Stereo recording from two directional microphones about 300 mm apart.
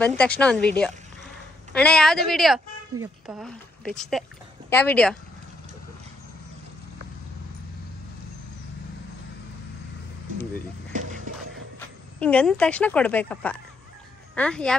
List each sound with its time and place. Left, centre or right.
0.0 s a woman's voice: centre
10.9 s music: right
12.2 s a woman's voice: centre